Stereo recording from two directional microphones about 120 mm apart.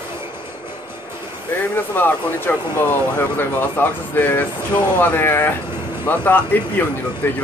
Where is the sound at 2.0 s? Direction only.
15° left (ahead or behind).